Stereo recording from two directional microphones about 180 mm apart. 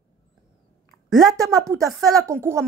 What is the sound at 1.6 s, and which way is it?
Speech, 20° right (ahead or behind).